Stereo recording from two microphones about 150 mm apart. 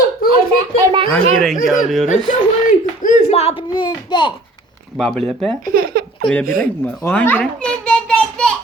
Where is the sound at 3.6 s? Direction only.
30° left (ahead or behind).